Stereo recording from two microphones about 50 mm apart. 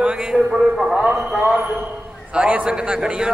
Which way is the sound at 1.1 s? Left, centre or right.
Centre.